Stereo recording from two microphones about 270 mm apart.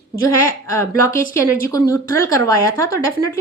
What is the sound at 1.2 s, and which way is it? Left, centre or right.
Speech, left.